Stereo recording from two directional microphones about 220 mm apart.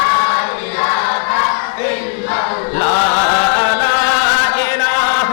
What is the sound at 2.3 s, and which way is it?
Chant, 15° left (ahead or behind).